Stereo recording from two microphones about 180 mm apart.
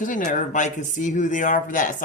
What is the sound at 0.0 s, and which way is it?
Speech, 45° left (ahead or behind).